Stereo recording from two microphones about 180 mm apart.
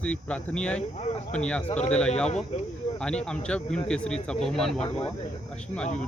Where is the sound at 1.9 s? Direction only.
5° left (ahead or behind).